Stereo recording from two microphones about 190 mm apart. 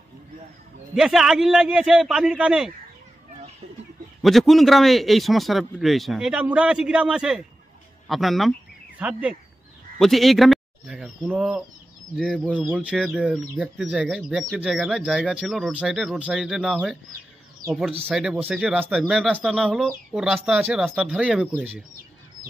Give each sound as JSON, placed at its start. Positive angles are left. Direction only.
{"t": 0.9, "sound": "speech", "side_deg": 0}
{"t": 4.2, "sound": "speech", "side_deg": 0}